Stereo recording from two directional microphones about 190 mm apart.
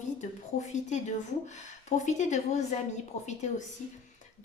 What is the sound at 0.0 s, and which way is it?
A woman's voice, 40° left (ahead or behind).